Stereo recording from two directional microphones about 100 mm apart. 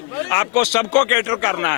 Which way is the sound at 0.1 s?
30° left (ahead or behind).